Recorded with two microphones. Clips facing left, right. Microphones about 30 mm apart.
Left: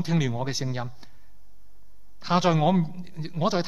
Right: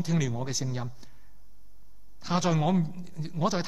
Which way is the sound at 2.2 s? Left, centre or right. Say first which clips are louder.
Left 5 dB; left.